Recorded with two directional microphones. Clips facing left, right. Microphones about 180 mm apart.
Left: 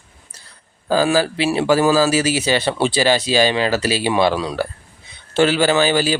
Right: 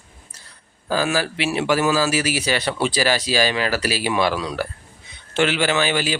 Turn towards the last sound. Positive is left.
turn(degrees=35)  # may be behind; listen again after turning